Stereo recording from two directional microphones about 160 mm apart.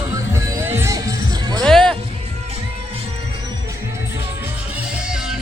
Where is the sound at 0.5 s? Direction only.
15° right (ahead or behind).